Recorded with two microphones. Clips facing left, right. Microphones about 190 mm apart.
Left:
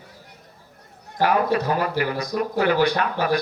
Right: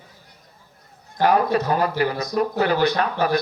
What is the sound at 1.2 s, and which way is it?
Speech, 35° right (ahead or behind).